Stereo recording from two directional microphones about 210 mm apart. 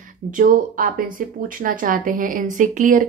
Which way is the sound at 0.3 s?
40° right (ahead or behind).